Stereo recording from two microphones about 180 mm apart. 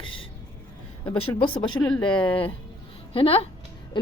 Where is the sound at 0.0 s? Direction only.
30° left (ahead or behind).